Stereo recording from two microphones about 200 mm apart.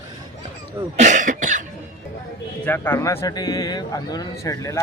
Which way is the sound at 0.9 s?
35° right (ahead or behind).